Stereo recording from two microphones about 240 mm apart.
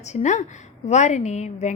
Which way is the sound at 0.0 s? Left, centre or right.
Left.